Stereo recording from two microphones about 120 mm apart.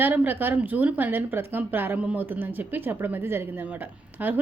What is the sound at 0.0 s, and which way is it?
A woman's voice, 15° right (ahead or behind).